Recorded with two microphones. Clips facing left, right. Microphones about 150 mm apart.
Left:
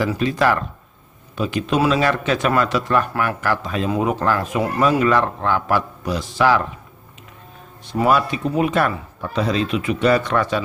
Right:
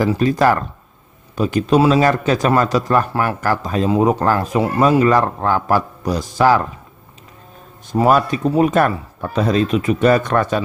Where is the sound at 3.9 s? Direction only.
25° right (ahead or behind).